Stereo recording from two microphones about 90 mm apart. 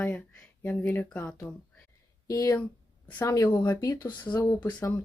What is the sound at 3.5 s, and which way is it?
Speech, 25° left (ahead or behind).